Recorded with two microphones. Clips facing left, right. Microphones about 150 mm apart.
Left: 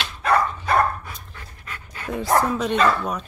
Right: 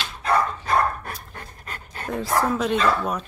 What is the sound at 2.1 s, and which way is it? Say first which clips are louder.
Speech: left 2 dB; centre (ahead or behind).